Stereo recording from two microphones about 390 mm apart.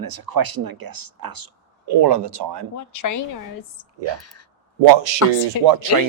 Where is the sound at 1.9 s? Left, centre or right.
Right.